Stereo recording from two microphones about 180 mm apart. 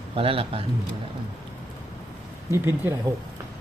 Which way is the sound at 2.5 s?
15° right (ahead or behind).